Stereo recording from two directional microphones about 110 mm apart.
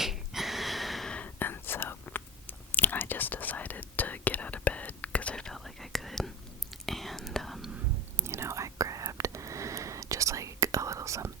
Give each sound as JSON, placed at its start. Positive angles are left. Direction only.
{"t": 0.0, "sound": "whispering", "side_deg": 0}
{"t": 8.1, "sound": "whispering", "side_deg": -25}